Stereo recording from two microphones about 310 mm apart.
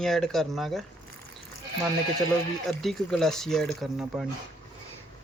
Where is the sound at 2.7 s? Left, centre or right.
Centre.